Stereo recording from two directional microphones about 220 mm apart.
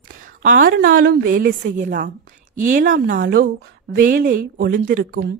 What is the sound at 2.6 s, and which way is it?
A woman's voice, 35° right (ahead or behind).